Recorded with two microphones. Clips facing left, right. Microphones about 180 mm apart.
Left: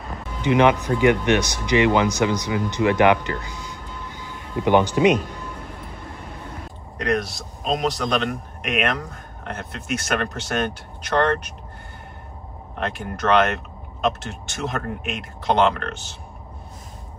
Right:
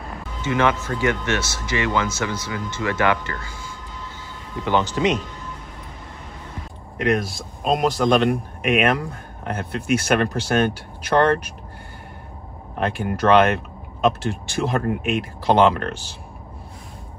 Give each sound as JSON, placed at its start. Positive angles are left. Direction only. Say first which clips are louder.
{"t": 0.4, "sound": "speech", "louder": "left 4 dB", "side_deg": 15}
{"t": 7.0, "sound": "speech", "louder": "right 2 dB", "side_deg": 0}
{"t": 12.7, "sound": "speech", "louder": "right 4 dB", "side_deg": 0}